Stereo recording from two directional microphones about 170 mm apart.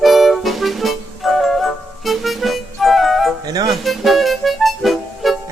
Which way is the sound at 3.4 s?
25° right (ahead or behind).